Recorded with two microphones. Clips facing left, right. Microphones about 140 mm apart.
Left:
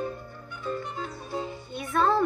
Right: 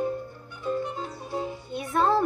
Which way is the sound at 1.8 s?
35° right (ahead or behind).